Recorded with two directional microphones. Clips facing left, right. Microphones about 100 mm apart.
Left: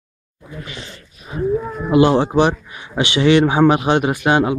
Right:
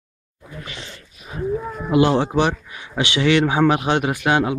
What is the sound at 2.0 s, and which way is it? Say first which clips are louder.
A man's voice: left 4 dB; 25° left (ahead or behind).